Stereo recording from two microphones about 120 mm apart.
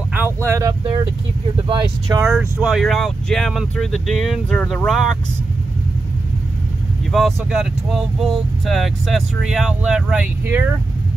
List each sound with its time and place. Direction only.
0.1 s a sound: 20° right (ahead or behind)
1.7 s speech: 35° right (ahead or behind)
2.2 s speech: centre (ahead or behind)
7.1 s speech: centre (ahead or behind)